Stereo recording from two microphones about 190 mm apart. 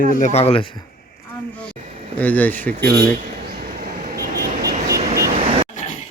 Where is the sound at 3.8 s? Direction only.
50° right (ahead or behind).